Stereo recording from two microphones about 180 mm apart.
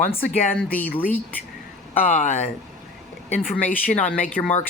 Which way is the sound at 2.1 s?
40° left (ahead or behind).